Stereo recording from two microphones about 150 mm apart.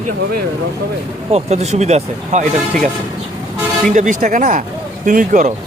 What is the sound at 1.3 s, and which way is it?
Speech, 45° right (ahead or behind).